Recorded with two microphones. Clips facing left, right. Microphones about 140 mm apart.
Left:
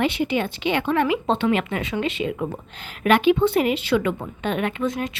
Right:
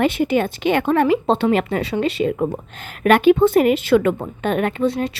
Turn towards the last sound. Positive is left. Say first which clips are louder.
# right 5 dB
turn(degrees=-35)  # may be behind; listen again after turning